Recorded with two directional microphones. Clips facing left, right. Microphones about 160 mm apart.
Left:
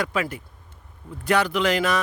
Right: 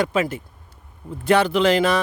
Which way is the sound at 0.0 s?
25° right (ahead or behind).